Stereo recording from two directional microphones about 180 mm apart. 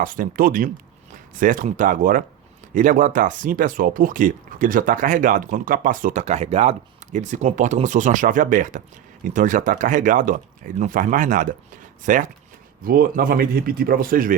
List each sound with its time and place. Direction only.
0.0 s speech: 50° right (ahead or behind)